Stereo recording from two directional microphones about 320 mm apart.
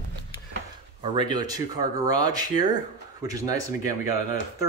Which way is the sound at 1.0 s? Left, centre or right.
Centre.